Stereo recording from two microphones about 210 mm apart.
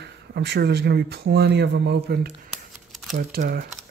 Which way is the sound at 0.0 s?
50° right (ahead or behind).